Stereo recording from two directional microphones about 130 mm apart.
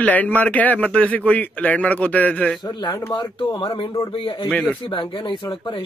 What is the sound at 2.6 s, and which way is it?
Speech, 30° left (ahead or behind).